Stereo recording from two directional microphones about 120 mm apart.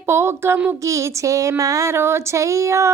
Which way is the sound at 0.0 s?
20° right (ahead or behind).